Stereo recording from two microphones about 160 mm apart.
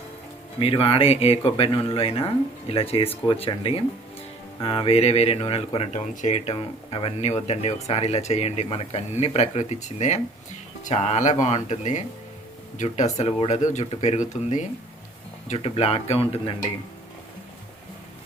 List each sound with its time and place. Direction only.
0.6 s speech: 35° left (ahead or behind)